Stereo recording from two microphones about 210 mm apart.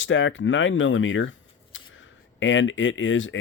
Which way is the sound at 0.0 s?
65° left (ahead or behind).